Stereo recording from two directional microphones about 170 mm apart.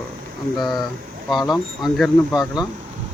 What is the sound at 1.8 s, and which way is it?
Speech, centre (ahead or behind).